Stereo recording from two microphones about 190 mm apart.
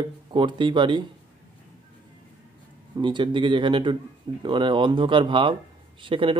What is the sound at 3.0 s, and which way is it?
Speech, 25° right (ahead or behind).